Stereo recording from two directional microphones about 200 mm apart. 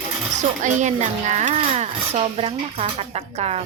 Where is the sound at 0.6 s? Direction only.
35° right (ahead or behind).